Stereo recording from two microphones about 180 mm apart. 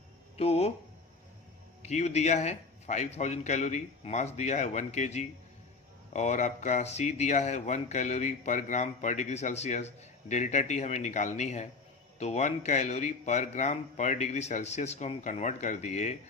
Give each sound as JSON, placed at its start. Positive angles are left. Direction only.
{"t": 0.3, "sound": "speech", "side_deg": 35}
{"t": 1.8, "sound": "speech", "side_deg": 40}